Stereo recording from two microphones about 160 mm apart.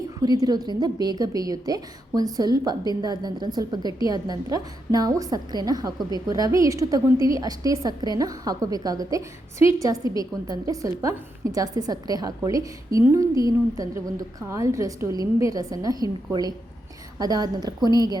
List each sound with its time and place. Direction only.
0.2 s a woman's voice: 25° right (ahead or behind)